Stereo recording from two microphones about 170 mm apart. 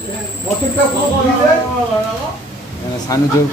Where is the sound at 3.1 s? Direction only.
20° left (ahead or behind).